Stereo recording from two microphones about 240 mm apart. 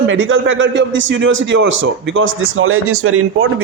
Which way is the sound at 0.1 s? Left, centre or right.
Right.